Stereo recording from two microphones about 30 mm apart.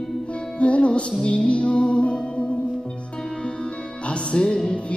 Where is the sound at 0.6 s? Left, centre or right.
Left.